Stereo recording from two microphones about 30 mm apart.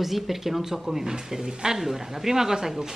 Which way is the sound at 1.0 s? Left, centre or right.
Right.